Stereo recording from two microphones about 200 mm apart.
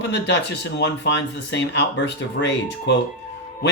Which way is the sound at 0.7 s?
60° left (ahead or behind).